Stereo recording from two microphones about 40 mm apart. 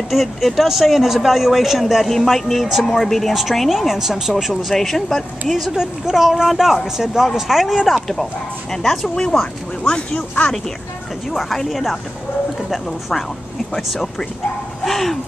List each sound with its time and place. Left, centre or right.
0.1 s speech: centre
5.5 s speech: centre
8.7 s speech: centre
10.1 s speech: left
11.3 s speech: centre
14.9 s speech: centre